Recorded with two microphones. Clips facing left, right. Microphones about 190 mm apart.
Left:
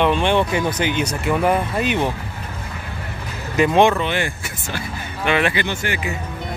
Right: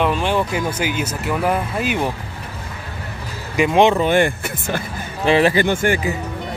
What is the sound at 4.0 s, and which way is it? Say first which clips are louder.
Speech: right 7 dB; 50° right (ahead or behind).